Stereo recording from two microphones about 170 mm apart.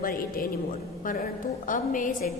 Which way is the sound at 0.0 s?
60° left (ahead or behind).